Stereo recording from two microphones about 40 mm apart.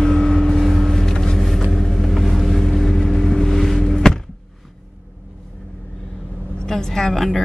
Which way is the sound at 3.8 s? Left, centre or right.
Centre.